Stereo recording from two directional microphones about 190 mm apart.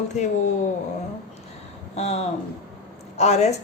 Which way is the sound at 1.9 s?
35° left (ahead or behind).